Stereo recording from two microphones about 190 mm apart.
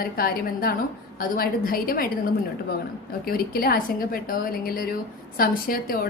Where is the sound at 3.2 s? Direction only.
50° left (ahead or behind).